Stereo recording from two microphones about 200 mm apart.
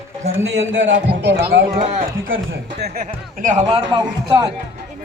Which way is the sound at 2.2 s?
75° right (ahead or behind).